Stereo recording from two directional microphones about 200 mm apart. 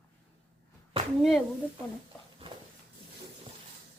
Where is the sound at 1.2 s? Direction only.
Centre (ahead or behind).